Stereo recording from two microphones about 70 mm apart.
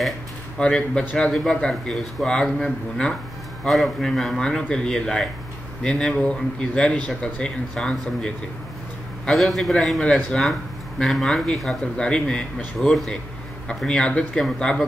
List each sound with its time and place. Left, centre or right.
0.6 s a man's voice: centre
9.3 s a man's voice: centre